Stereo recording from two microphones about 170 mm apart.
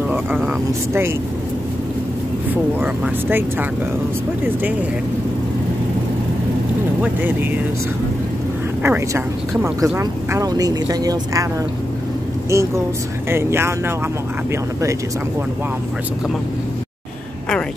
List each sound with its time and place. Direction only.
0.5 s speech: 15° right (ahead or behind)
2.8 s speech: 10° right (ahead or behind)
7.0 s speech: 10° right (ahead or behind)
8.8 s speech: 15° right (ahead or behind)
12.4 s speech: 15° right (ahead or behind)